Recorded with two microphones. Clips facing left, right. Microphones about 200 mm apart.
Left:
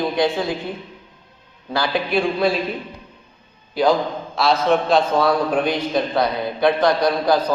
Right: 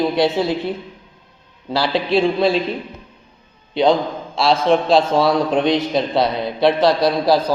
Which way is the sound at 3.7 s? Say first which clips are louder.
Right 2 dB; 25° right (ahead or behind).